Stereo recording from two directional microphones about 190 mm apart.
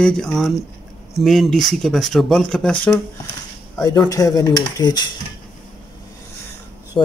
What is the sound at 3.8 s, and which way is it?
Speech, 20° left (ahead or behind).